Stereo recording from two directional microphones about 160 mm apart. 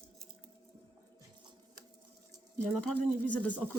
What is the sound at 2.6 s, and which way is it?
Speech, 5° left (ahead or behind).